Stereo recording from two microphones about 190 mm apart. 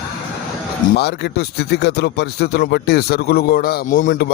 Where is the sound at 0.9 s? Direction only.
60° left (ahead or behind).